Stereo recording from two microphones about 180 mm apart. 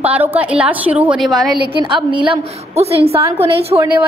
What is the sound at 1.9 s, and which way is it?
A woman's voice, 25° right (ahead or behind).